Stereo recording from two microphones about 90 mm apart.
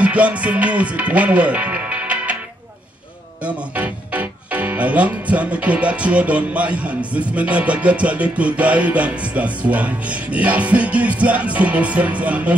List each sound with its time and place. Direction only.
0.0 s music: 15° right (ahead or behind)
3.4 s speech: 15° right (ahead or behind)